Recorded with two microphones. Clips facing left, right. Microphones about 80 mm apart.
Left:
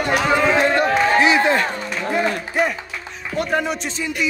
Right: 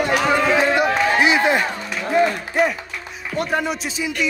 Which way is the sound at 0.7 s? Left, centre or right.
Centre.